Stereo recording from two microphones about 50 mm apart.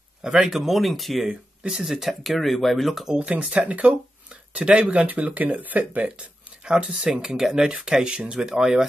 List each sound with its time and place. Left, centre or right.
0.2 s speech: centre
0.5 s speech: centre
1.3 s speech: centre
3.2 s speech: right